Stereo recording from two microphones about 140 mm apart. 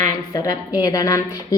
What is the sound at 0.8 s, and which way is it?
Speech, 25° left (ahead or behind).